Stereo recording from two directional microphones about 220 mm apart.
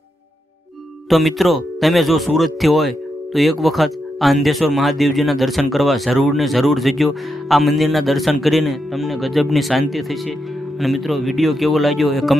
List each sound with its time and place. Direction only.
1.0 s speech: centre (ahead or behind)